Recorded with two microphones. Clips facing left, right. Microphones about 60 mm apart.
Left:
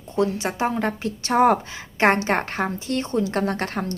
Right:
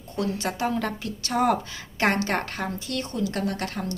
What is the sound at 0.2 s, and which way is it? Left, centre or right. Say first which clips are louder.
A woman's voice: left 5 dB; left.